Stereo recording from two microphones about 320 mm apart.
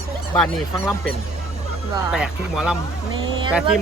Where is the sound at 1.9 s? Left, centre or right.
Centre.